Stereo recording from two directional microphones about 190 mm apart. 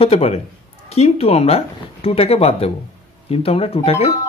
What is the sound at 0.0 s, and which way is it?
Speech, 30° left (ahead or behind).